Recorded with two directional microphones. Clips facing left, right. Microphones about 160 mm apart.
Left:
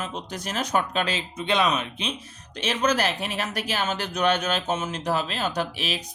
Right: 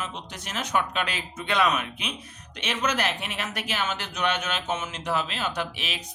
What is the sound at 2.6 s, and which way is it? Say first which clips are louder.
Speech: left 4 dB; 35° left (ahead or behind).